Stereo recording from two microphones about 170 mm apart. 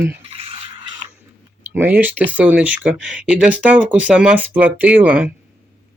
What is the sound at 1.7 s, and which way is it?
Speech, 10° right (ahead or behind).